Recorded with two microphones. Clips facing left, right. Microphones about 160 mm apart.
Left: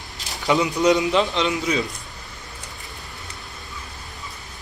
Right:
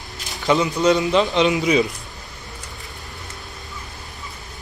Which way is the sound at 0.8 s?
15° left (ahead or behind).